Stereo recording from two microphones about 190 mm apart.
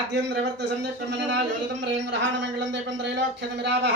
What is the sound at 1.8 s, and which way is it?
A man's voice, 70° right (ahead or behind).